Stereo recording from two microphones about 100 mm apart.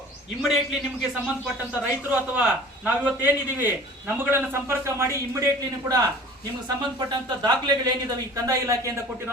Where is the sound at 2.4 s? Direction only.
10° right (ahead or behind); by 5.4 s 30° right (ahead or behind).